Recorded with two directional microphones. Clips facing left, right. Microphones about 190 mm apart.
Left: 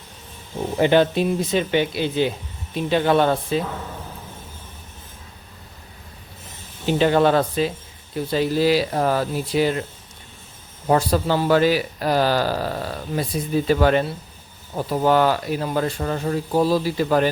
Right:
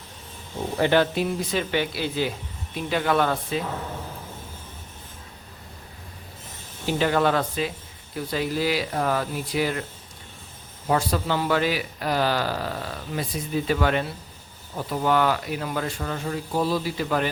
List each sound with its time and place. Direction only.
0.8 s speech: 20° left (ahead or behind)
6.8 s speech: 25° left (ahead or behind)
10.8 s speech: 35° left (ahead or behind)